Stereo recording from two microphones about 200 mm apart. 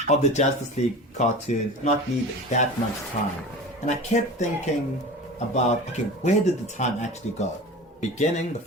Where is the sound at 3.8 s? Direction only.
35° left (ahead or behind).